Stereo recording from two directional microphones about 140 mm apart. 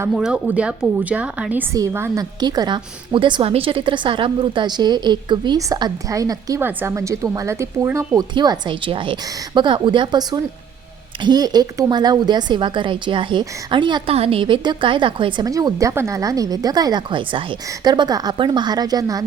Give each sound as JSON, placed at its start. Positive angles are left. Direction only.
{"t": 0.1, "sound": "speech", "side_deg": -5}
{"t": 1.7, "sound": "a woman's voice", "side_deg": -20}
{"t": 8.3, "sound": "a woman's voice", "side_deg": -35}